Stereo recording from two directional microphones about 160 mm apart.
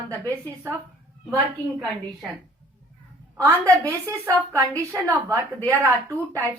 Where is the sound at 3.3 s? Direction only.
15° right (ahead or behind).